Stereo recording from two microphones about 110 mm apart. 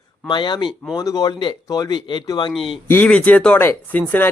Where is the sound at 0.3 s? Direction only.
45° left (ahead or behind).